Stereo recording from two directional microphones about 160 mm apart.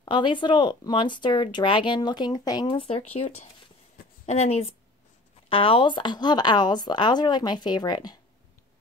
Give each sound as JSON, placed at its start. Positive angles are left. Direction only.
{"t": 0.0, "sound": "speech", "side_deg": 30}
{"t": 4.3, "sound": "a woman's voice", "side_deg": 45}